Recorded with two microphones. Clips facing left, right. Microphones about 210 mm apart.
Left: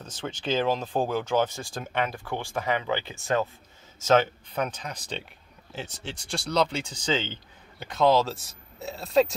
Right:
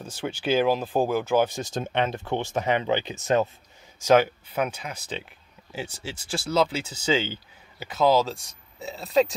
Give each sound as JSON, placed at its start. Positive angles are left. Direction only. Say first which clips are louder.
{"t": 0.0, "sound": "speech", "louder": "right 4 dB", "side_deg": -10}